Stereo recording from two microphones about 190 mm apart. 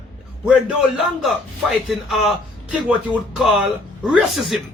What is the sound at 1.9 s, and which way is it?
A man's voice, centre (ahead or behind).